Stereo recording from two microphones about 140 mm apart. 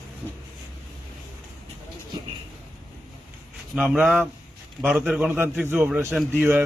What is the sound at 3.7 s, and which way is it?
A man's voice, 5° right (ahead or behind).